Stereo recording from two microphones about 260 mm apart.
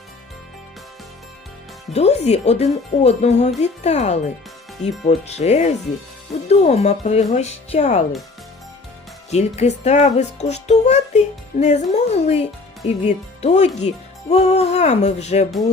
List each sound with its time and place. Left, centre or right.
1.9 s speech: left
9.3 s speech: left